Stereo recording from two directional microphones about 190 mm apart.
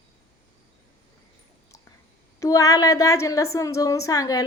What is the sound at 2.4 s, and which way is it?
A woman's voice, 15° left (ahead or behind).